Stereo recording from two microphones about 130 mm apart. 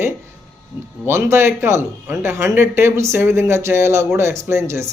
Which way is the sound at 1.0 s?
20° right (ahead or behind).